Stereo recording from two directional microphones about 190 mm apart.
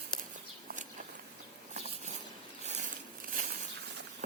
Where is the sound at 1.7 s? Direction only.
35° right (ahead or behind).